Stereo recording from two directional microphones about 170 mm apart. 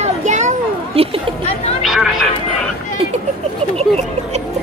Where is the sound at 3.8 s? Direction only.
40° right (ahead or behind).